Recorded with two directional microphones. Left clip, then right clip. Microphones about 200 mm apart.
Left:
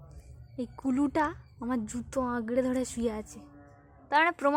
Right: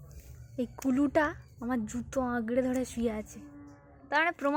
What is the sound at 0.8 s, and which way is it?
A woman's voice, centre (ahead or behind).